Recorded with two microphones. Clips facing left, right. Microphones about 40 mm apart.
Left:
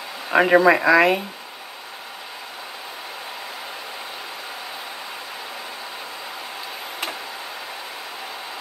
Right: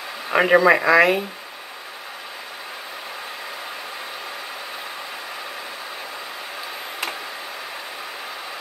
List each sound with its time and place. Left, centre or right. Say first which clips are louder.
0.3 s speech: even; centre